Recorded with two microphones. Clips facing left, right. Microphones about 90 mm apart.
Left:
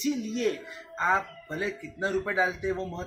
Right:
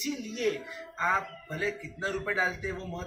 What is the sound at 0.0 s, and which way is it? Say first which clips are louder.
Speech: left 3 dB; 35° left (ahead or behind).